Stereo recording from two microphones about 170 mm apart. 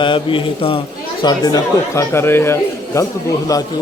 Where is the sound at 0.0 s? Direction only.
30° left (ahead or behind).